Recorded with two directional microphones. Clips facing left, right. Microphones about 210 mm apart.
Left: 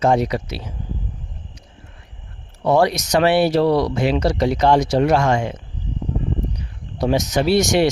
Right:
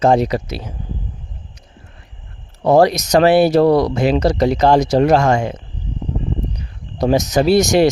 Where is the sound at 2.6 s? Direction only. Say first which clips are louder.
Right 4 dB; 40° right (ahead or behind).